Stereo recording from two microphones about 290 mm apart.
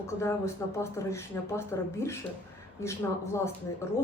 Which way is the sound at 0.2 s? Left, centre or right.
Centre.